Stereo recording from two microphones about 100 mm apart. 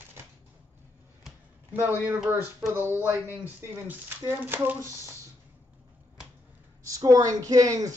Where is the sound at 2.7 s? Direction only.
25° right (ahead or behind).